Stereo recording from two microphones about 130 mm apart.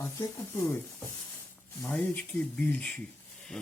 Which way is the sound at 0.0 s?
20° left (ahead or behind).